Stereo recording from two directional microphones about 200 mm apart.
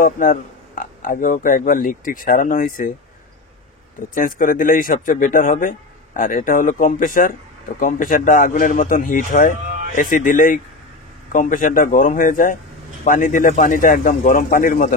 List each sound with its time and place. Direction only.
0.0 s speech: 45° left (ahead or behind)
4.1 s speech: 40° left (ahead or behind)